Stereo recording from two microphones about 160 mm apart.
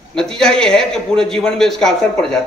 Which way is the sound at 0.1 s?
5° left (ahead or behind).